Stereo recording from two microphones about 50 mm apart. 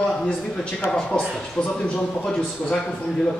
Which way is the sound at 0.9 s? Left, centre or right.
Centre.